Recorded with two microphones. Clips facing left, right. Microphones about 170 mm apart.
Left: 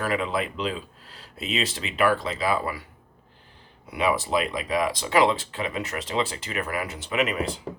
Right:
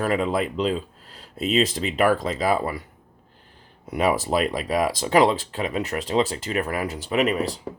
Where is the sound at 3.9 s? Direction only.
45° right (ahead or behind).